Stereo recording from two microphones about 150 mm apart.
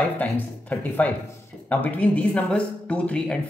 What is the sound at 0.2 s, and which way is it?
Speech, 10° left (ahead or behind).